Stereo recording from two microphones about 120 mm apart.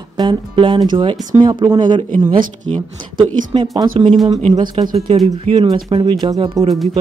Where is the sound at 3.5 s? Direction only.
45° right (ahead or behind).